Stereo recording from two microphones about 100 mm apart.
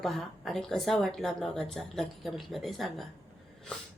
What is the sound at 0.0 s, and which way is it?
A woman's voice, centre (ahead or behind).